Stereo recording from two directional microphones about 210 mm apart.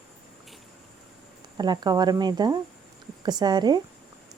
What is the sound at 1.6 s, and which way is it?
Speech, 20° right (ahead or behind).